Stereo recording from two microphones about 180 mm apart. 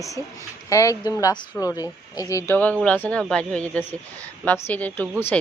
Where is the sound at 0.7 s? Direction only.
20° left (ahead or behind).